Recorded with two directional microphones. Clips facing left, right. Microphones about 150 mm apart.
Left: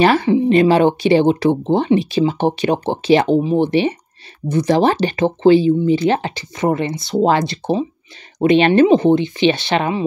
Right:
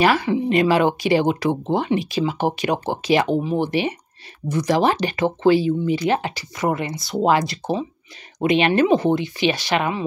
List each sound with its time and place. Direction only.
0.0 s speech: 30° left (ahead or behind)